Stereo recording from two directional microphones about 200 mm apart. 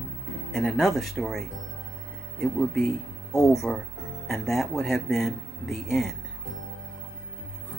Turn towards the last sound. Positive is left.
turn(degrees=0)  # may be behind; listen again after turning